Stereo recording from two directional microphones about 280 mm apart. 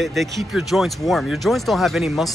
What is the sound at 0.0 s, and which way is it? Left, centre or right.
Speech, centre.